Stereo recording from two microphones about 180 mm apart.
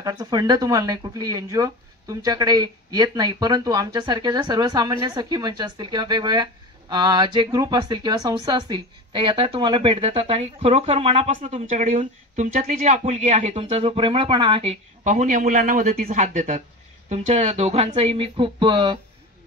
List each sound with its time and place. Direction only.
0.0 s speech: 20° right (ahead or behind)